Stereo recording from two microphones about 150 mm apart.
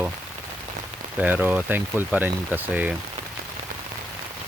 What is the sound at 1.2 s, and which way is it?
Speech, 10° right (ahead or behind).